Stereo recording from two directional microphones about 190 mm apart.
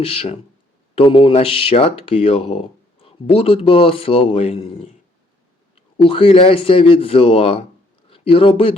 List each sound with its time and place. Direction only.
0.0 s speech: 30° left (ahead or behind)
6.0 s speech: 30° left (ahead or behind)